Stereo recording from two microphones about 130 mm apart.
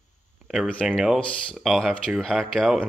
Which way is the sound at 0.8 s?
Centre (ahead or behind).